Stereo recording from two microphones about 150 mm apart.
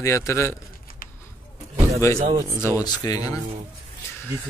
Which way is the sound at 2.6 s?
20° left (ahead or behind).